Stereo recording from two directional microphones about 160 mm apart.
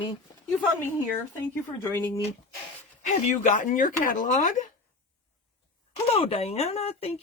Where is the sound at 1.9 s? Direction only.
15° left (ahead or behind).